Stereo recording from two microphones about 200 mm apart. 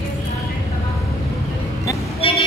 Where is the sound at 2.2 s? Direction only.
30° left (ahead or behind).